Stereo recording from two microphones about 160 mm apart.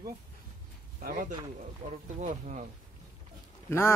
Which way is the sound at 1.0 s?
60° right (ahead or behind).